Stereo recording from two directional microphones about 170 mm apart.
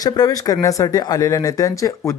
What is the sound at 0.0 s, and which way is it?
Speech, 20° left (ahead or behind).